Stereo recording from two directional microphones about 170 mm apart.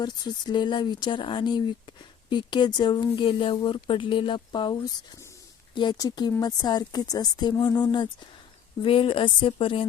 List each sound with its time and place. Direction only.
0.0 s a woman's voice: 25° left (ahead or behind)